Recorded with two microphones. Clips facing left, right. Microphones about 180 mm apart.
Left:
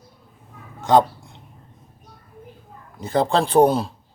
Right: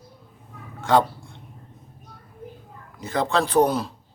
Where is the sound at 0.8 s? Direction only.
20° left (ahead or behind).